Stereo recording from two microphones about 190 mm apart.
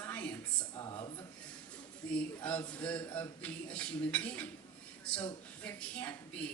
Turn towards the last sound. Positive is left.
turn(degrees=5)  # may be behind; listen again after turning